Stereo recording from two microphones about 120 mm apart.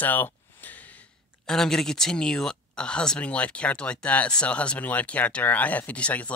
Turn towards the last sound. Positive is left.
turn(degrees=10)  # may be behind; listen again after turning